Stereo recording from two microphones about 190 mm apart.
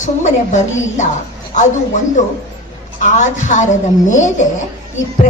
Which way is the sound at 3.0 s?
40° left (ahead or behind).